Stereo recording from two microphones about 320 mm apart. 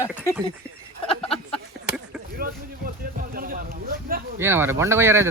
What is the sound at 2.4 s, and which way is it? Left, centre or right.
Speech, right.